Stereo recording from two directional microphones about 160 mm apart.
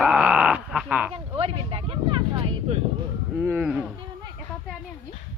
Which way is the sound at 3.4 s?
10° right (ahead or behind).